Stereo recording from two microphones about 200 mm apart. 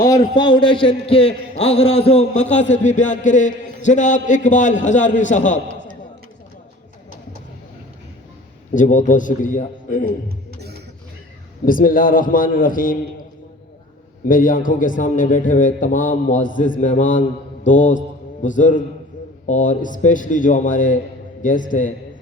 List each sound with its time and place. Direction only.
0.0 s a man's voice: 20° left (ahead or behind); by 5.5 s 35° left (ahead or behind)
8.7 s a man's voice: 40° left (ahead or behind)
10.2 s music: 55° right (ahead or behind)
11.6 s a man's voice: 45° left (ahead or behind)
14.3 s a man's voice: 40° left (ahead or behind)